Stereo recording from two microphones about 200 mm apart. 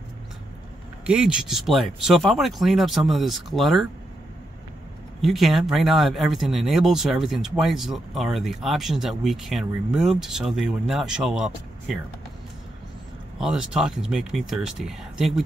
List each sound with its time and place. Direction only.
1.0 s speech: 5° right (ahead or behind)
5.2 s speech: centre (ahead or behind)
13.4 s speech: 5° right (ahead or behind)